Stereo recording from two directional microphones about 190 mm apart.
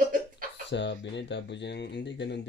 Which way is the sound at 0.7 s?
70° left (ahead or behind).